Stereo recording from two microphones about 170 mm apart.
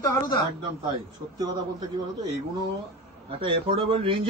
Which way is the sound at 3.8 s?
30° right (ahead or behind).